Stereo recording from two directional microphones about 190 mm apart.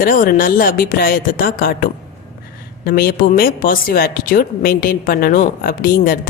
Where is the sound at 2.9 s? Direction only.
55° left (ahead or behind).